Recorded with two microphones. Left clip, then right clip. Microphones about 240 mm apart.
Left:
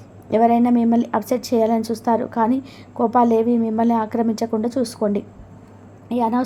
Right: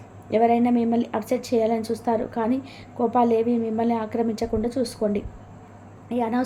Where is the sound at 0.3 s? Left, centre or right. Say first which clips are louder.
Left 3 dB; left.